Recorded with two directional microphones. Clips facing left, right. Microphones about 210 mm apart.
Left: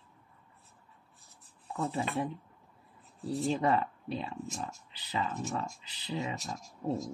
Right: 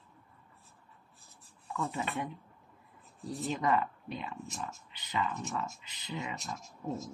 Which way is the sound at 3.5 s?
30° left (ahead or behind).